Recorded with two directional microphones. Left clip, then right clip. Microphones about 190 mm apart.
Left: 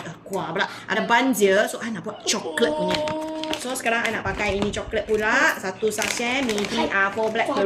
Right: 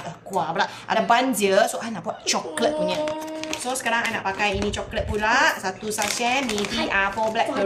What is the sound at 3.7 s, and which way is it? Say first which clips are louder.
A woman's voice: even; 15° right (ahead or behind).